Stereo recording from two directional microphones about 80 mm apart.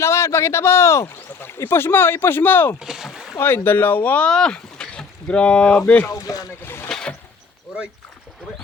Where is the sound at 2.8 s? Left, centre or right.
Centre.